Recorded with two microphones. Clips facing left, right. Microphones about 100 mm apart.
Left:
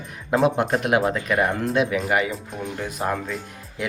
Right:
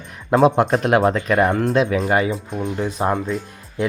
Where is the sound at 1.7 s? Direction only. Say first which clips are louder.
Right 4 dB; 35° right (ahead or behind).